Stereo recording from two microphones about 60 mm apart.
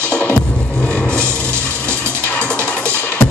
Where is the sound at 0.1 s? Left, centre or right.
Left.